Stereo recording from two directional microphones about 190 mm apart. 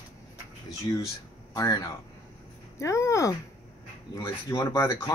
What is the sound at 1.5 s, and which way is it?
Speech, 20° left (ahead or behind).